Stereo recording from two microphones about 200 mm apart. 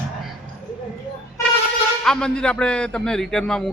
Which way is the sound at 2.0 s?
5° left (ahead or behind).